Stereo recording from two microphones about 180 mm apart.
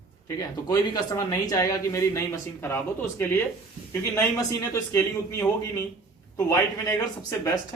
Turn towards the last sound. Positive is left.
turn(degrees=15)  # may be behind; listen again after turning